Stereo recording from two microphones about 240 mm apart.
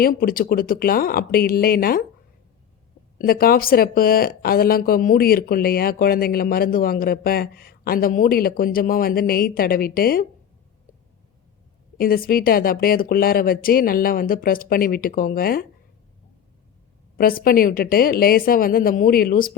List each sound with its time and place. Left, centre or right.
0.0 s speech: left
3.2 s speech: left
11.9 s speech: left
17.2 s speech: left